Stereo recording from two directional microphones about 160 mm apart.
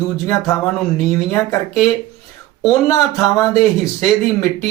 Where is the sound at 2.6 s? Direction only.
20° left (ahead or behind).